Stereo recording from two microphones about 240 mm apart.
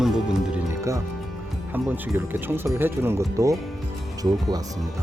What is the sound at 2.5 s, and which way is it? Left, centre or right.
Speech, centre.